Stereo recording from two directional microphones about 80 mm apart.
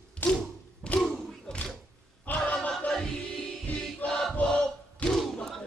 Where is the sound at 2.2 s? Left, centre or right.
Centre.